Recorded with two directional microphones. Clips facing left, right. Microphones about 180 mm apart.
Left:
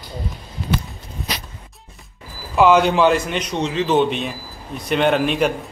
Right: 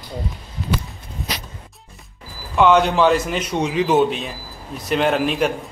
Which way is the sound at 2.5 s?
5° left (ahead or behind).